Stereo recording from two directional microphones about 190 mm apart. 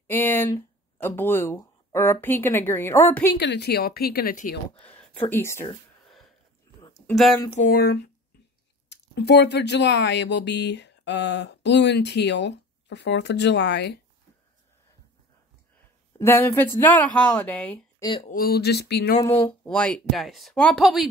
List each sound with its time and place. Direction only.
0.0 s speech: 10° left (ahead or behind)
3.3 s speech: 60° left (ahead or behind)
4.9 s speech: 10° left (ahead or behind)
7.1 s speech: centre (ahead or behind)
7.4 s a sound: 35° left (ahead or behind)
7.7 s speech: 60° left (ahead or behind)
16.2 s speech: 10° left (ahead or behind)
18.0 s speech: 25° left (ahead or behind)
18.3 s speech: 55° left (ahead or behind)
19.2 s speech: 15° left (ahead or behind)
19.7 s speech: 5° left (ahead or behind)